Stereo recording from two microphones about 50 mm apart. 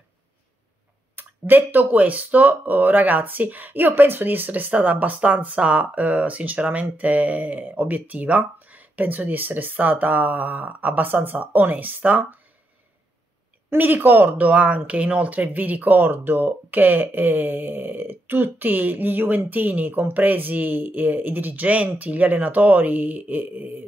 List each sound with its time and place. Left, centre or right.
1.1 s speech: right
13.7 s speech: right